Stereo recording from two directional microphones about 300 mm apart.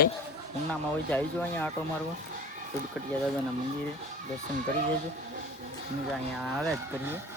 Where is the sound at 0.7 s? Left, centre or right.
Centre.